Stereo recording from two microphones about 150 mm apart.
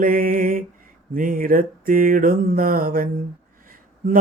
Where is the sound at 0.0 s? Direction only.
70° right (ahead or behind).